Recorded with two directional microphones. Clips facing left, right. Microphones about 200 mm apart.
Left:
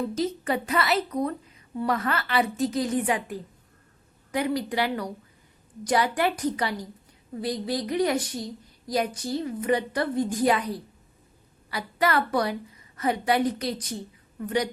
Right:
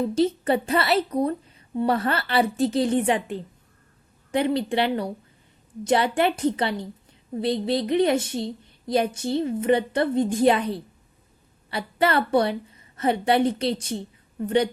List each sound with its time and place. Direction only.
0.1 s a woman's voice: 30° right (ahead or behind)